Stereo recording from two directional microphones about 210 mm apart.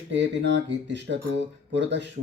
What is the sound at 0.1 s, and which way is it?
Speech, 55° right (ahead or behind).